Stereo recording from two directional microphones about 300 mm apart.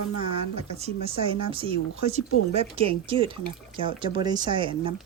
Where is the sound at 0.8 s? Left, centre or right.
Centre.